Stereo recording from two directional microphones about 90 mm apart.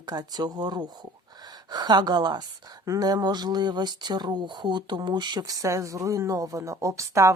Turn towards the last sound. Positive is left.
turn(degrees=-35)  # may be behind; listen again after turning